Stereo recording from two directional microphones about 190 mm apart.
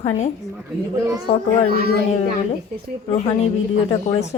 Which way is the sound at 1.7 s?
55° right (ahead or behind).